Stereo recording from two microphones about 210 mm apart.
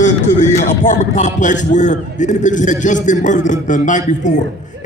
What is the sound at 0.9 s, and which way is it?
A man's voice, 35° left (ahead or behind).